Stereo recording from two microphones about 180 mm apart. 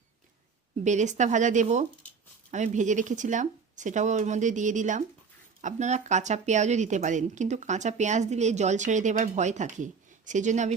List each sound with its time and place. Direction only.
0.9 s speech: 40° right (ahead or behind)